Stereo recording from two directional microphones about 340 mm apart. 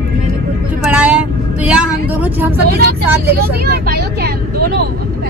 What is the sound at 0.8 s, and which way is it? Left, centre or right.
Speech, centre.